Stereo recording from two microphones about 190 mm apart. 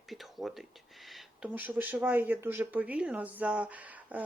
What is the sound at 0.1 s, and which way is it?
Speech, centre (ahead or behind).